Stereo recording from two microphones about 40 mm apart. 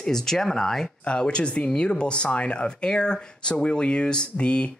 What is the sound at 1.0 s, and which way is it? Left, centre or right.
Speech, left.